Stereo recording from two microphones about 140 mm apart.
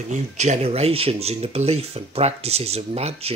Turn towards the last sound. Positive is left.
turn(degrees=-45)  # may be behind; listen again after turning